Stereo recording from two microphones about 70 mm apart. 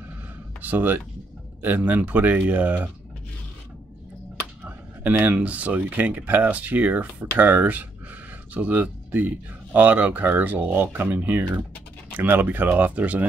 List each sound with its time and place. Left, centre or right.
0.6 s speech: right
5.1 s speech: right